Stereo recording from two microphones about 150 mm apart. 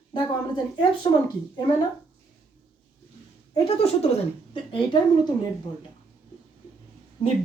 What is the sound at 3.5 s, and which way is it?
Speech, 40° left (ahead or behind).